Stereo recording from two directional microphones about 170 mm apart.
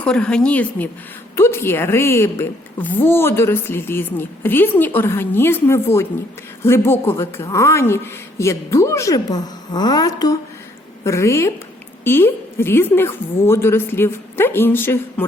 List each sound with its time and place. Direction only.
0.0 s a woman's voice: 5° left (ahead or behind)